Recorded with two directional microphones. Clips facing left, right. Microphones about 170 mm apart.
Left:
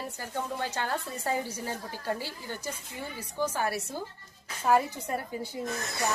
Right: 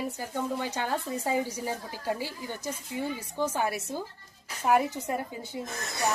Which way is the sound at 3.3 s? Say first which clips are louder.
Even; 20° right (ahead or behind).